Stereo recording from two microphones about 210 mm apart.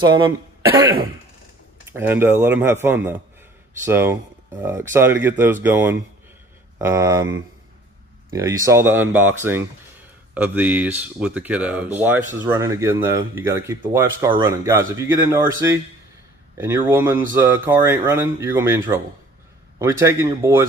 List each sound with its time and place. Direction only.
0.0 s speech: 20° right (ahead or behind)
8.3 s speech: 15° right (ahead or behind)